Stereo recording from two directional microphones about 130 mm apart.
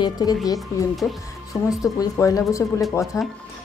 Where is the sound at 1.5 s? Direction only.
25° left (ahead or behind).